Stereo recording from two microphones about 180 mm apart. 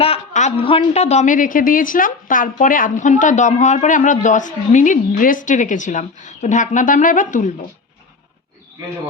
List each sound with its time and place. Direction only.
0.0 s a woman's voice: 35° left (ahead or behind)